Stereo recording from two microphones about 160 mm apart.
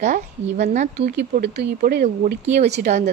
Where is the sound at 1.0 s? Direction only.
90° right.